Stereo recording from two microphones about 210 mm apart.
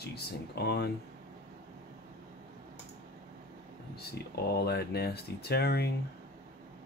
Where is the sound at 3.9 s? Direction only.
50° left (ahead or behind).